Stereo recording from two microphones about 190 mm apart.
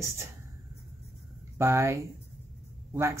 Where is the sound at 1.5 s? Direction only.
15° right (ahead or behind).